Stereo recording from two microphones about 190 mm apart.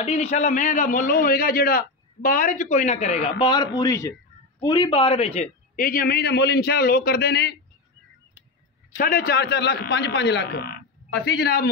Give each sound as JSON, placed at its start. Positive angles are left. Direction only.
{"t": 0.0, "sound": "a man's voice", "side_deg": 35}
{"t": 5.8, "sound": "a man's voice", "side_deg": 50}
{"t": 8.9, "sound": "a man's voice", "side_deg": 50}